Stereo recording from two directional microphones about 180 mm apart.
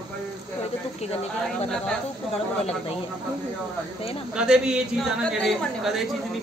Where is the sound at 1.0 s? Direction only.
35° left (ahead or behind).